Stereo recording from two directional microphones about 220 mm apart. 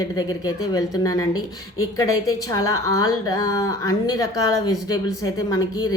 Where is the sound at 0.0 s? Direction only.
15° left (ahead or behind).